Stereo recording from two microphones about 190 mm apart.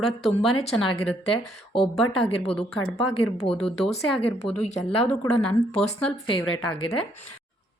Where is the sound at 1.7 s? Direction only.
Centre (ahead or behind).